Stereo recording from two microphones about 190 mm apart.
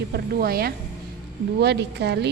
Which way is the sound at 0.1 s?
55° right (ahead or behind).